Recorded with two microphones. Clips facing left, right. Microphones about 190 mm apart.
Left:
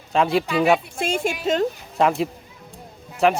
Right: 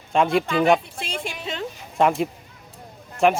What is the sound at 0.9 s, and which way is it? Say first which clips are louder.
Speech: left 8 dB; 45° left (ahead or behind).